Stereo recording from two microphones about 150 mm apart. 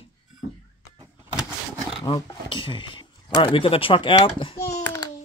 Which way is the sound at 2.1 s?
30° left (ahead or behind).